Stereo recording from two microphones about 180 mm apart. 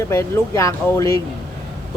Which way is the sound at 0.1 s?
15° left (ahead or behind).